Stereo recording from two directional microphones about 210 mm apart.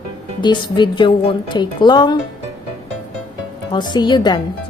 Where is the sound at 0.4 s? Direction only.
20° left (ahead or behind).